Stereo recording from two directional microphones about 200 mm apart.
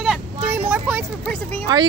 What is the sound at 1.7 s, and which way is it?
Speech, 20° right (ahead or behind).